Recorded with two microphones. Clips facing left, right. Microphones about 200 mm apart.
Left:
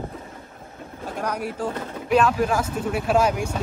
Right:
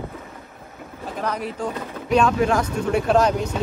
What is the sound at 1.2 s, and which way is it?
Speech, 10° left (ahead or behind).